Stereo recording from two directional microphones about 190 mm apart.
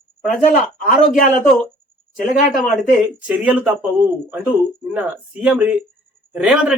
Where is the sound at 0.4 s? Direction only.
45° left (ahead or behind).